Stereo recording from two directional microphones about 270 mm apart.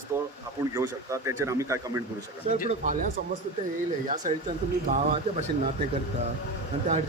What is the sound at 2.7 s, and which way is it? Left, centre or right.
Speech, right.